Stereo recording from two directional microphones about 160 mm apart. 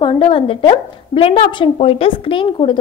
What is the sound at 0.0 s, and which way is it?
A woman's voice, 30° left (ahead or behind).